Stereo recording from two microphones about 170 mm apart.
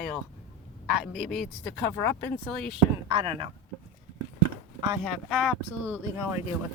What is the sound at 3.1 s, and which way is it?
Speech, 35° right (ahead or behind).